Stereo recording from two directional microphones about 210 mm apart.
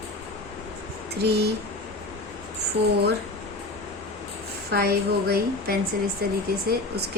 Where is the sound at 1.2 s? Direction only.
50° right (ahead or behind).